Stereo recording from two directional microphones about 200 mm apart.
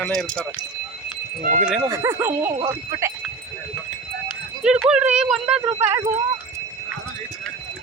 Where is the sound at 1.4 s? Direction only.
40° right (ahead or behind).